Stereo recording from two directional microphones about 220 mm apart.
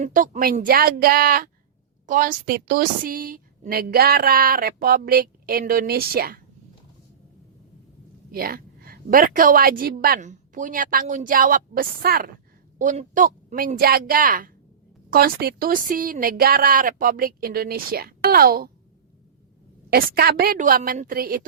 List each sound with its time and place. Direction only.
0.0 s a woman's voice: 35° right (ahead or behind)
8.3 s a woman's voice: 40° right (ahead or behind)
19.9 s speech: 45° right (ahead or behind)